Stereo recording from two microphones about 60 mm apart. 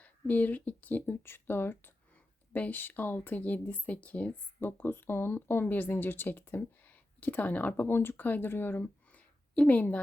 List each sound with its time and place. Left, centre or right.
0.0 s speech: left
1.2 s speech: left
4.6 s speech: left
8.8 s a sound: left